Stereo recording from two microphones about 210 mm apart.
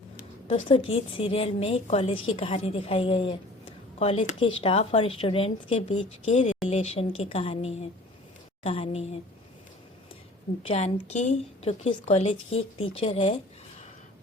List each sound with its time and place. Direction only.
0.4 s a woman's voice: 30° left (ahead or behind)
10.7 s a woman's voice: 30° left (ahead or behind)